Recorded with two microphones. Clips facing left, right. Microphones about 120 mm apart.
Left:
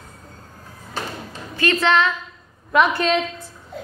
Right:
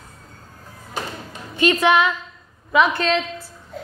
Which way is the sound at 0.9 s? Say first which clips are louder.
Even; 15° right (ahead or behind).